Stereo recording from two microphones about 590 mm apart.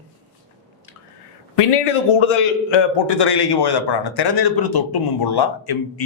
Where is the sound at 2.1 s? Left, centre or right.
Left.